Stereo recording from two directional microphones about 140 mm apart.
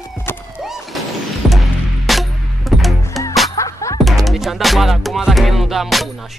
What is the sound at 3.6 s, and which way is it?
Music, 20° left (ahead or behind).